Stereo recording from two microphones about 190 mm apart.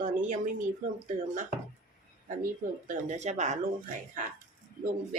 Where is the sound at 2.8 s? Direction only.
40° right (ahead or behind).